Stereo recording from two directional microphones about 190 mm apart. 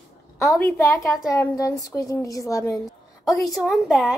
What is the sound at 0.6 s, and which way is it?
A woman's voice, 15° left (ahead or behind).